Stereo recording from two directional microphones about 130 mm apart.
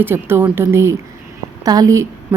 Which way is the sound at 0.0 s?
15° right (ahead or behind).